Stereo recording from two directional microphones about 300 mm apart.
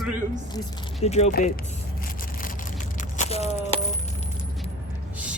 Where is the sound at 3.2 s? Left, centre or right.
Left.